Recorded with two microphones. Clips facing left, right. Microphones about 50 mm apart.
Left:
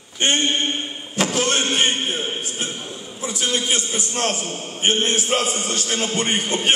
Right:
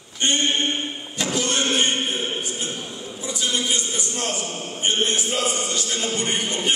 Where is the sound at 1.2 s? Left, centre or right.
Left.